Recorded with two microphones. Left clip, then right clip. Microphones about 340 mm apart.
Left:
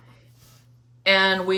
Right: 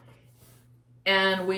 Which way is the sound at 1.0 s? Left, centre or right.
Centre.